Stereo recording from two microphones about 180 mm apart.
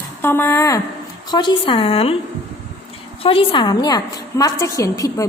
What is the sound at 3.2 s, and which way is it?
A woman's voice, 30° left (ahead or behind).